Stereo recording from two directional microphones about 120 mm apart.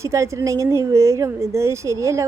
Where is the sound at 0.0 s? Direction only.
25° right (ahead or behind).